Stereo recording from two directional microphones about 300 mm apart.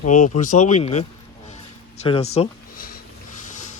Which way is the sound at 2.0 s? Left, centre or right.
Left.